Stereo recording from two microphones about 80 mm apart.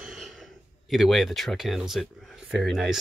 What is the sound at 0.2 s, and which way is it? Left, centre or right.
Speech, centre.